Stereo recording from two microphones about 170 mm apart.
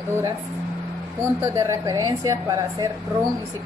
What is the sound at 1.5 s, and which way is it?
A woman's voice, 20° right (ahead or behind).